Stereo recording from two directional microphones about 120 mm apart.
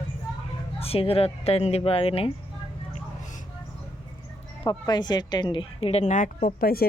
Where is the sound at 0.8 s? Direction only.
55° left (ahead or behind).